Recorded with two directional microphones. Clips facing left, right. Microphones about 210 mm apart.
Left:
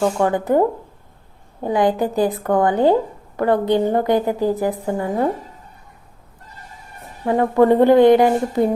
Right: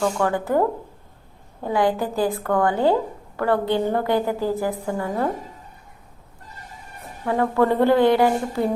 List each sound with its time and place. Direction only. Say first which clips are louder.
0.2 s a woman's voice: left 4 dB; 20° left (ahead or behind)
1.6 s a woman's voice: left 3 dB; 20° left (ahead or behind)
7.3 s a woman's voice: left 5 dB; 15° left (ahead or behind)